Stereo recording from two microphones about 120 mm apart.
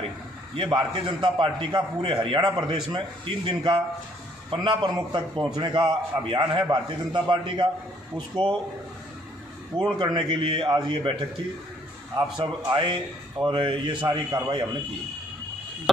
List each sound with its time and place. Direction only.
0.6 s a man's voice: 40° right (ahead or behind)
9.9 s a man's voice: 40° right (ahead or behind)
12.4 s a man's voice: 40° right (ahead or behind)